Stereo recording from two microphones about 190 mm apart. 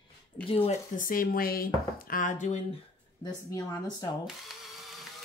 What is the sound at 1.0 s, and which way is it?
Speech, 45° left (ahead or behind).